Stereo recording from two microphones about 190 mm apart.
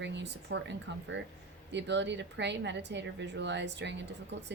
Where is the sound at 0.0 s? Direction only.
65° right (ahead or behind).